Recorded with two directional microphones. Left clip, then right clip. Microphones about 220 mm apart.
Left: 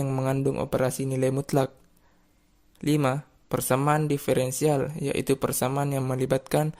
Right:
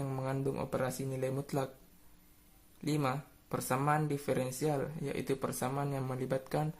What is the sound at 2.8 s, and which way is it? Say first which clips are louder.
Speech: left 9 dB; 35° left (ahead or behind).